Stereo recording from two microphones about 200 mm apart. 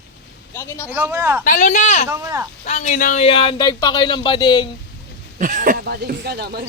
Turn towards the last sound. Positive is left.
turn(degrees=-55)  # may be behind; listen again after turning